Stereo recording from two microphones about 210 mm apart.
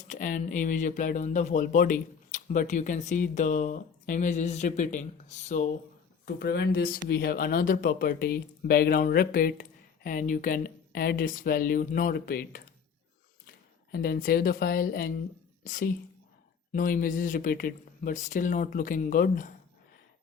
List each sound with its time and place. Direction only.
0.1 s speech: 35° left (ahead or behind)
6.2 s speech: 50° left (ahead or behind)